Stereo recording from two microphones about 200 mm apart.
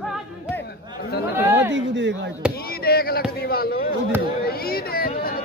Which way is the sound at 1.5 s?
65° right (ahead or behind).